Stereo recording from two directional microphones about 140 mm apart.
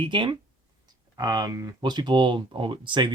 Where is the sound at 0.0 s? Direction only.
35° right (ahead or behind).